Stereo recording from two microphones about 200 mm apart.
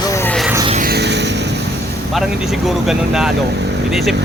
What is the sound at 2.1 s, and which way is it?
Speech, centre (ahead or behind).